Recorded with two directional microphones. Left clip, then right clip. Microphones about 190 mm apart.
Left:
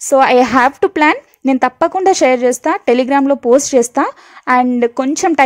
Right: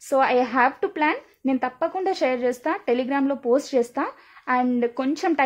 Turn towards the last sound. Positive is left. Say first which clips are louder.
# left 10 dB
turn(degrees=40)  # may be behind; listen again after turning